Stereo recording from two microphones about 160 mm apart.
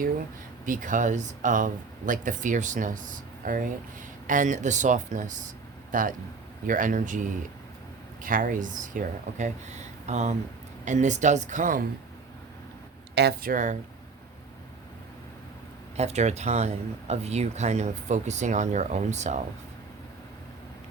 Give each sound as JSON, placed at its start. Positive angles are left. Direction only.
{"t": 0.6, "sound": "speech", "side_deg": -55}
{"t": 13.1, "sound": "speech", "side_deg": -75}
{"t": 16.0, "sound": "speech", "side_deg": -45}